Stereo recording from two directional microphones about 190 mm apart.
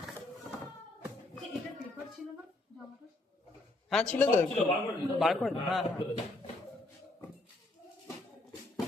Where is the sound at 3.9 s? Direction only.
5° left (ahead or behind).